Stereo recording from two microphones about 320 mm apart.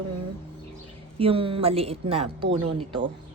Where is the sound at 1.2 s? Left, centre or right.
Centre.